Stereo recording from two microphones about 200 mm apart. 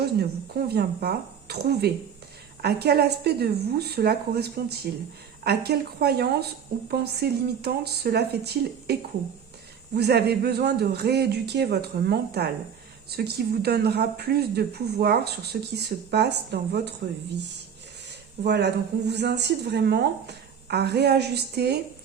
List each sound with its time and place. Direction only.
0.0 s speech: 55° right (ahead or behind)
18.4 s speech: 55° right (ahead or behind)